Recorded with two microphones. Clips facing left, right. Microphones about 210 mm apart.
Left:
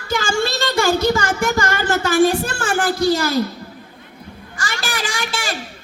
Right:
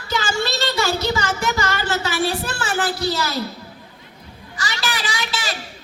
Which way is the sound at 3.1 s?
50° left (ahead or behind).